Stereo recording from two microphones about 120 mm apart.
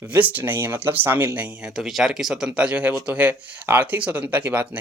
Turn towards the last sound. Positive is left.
turn(degrees=-15)  # may be behind; listen again after turning